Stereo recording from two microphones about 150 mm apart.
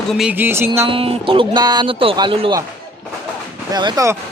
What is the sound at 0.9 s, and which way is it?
Speech, 35° right (ahead or behind).